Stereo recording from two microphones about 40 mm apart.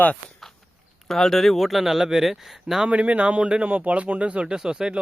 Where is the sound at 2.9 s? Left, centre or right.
Right.